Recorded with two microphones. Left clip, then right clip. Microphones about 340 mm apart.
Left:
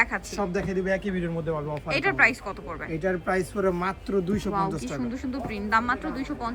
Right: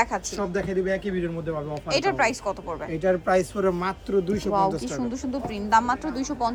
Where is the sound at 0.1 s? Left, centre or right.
Centre.